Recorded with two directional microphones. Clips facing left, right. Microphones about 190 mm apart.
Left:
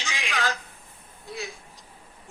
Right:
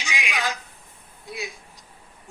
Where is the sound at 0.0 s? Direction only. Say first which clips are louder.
Right 1 dB; 15° right (ahead or behind).